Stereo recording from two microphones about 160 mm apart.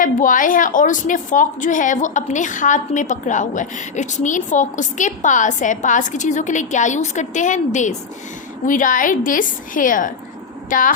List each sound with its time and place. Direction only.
0.0 s a woman's voice: 55° left (ahead or behind)